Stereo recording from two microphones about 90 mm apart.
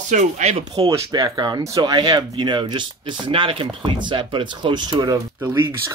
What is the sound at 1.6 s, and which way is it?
Speech, 40° right (ahead or behind).